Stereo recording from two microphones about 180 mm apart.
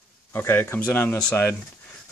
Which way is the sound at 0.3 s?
10° left (ahead or behind).